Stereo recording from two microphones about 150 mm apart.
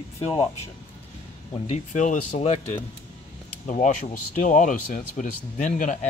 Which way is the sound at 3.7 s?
55° left (ahead or behind).